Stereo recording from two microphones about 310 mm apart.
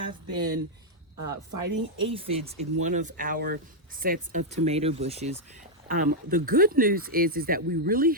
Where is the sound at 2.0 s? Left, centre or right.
Centre.